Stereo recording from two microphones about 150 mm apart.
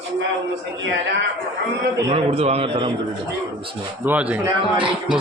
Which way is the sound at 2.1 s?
40° right (ahead or behind).